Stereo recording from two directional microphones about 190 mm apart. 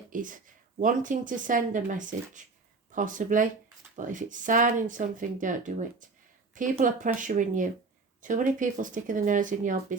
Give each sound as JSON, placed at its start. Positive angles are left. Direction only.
{"t": 0.1, "sound": "speech", "side_deg": -45}